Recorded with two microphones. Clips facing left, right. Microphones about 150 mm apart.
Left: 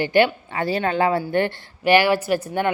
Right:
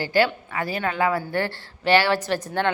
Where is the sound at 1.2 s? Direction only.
20° left (ahead or behind).